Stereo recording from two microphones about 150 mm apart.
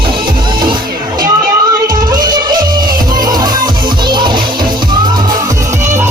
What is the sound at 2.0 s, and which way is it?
Music, 25° right (ahead or behind).